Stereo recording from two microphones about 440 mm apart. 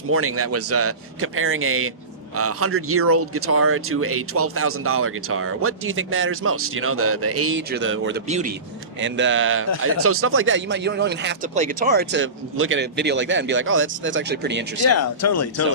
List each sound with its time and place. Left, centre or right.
0.1 s speech: right
14.8 s speech: left